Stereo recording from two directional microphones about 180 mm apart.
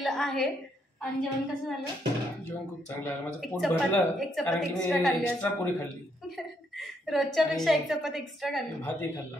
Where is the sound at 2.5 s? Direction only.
10° left (ahead or behind).